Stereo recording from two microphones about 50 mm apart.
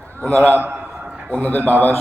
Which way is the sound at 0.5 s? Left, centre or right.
Right.